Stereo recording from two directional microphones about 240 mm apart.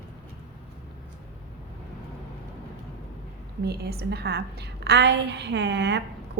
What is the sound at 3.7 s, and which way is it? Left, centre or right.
A woman's voice, right.